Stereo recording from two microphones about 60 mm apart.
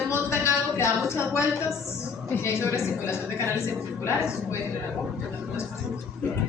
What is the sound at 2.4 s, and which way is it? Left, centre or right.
Speech, left.